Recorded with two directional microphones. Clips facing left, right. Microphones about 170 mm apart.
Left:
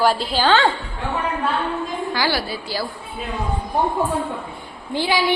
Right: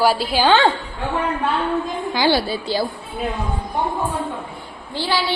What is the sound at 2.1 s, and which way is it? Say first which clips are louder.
Speech: right 7 dB; 25° right (ahead or behind).